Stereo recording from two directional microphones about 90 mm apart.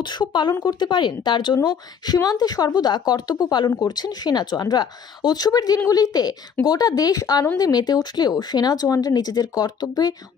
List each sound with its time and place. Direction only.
0.0 s speech: 55° left (ahead or behind)